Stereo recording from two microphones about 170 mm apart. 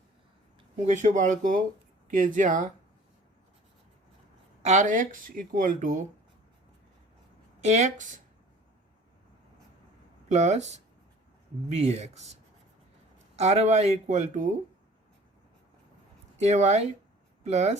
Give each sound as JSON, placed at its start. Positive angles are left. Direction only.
{"t": 0.8, "sound": "speech", "side_deg": -45}
{"t": 4.6, "sound": "speech", "side_deg": -45}
{"t": 7.6, "sound": "speech", "side_deg": -40}
{"t": 10.2, "sound": "speech", "side_deg": -40}
{"t": 13.3, "sound": "speech", "side_deg": -40}
{"t": 16.4, "sound": "speech", "side_deg": -40}